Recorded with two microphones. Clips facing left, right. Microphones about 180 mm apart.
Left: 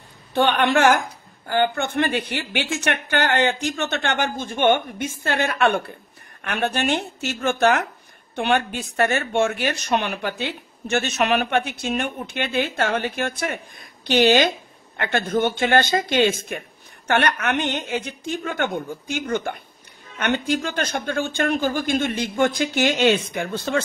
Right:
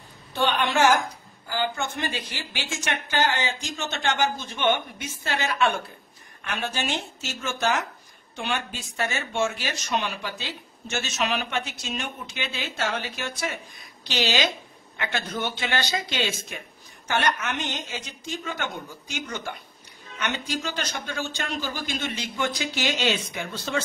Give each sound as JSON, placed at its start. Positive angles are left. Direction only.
{"t": 0.3, "sound": "speech", "side_deg": 60}